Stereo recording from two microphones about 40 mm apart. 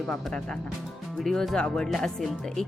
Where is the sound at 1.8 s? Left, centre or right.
Centre.